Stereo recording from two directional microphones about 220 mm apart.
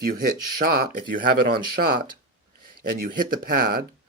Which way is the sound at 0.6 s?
45° right (ahead or behind).